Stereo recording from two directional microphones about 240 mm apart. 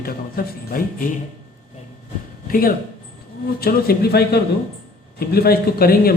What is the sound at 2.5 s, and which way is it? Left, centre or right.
Speech, left.